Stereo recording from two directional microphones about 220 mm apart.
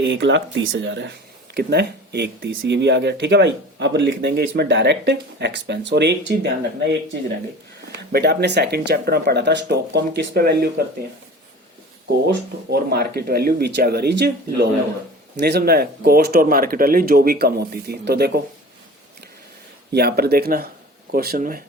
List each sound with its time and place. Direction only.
0.0 s speech: 55° right (ahead or behind)
12.3 s speech: 45° right (ahead or behind)
19.9 s speech: 45° right (ahead or behind)